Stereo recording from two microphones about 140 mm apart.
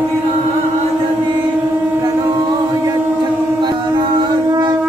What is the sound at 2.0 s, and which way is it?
Chant, 25° right (ahead or behind).